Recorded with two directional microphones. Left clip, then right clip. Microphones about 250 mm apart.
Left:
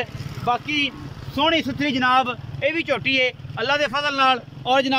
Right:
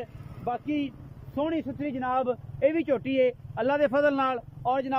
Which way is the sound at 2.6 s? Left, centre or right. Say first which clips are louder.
Left 3 dB; right.